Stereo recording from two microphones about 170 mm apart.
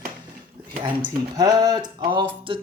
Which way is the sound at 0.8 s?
25° right (ahead or behind).